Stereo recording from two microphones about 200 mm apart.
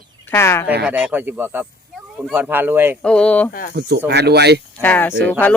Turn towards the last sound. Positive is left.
turn(degrees=10)  # may be behind; listen again after turning